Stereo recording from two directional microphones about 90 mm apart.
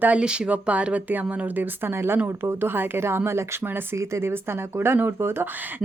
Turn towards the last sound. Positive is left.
turn(degrees=-25)  # may be behind; listen again after turning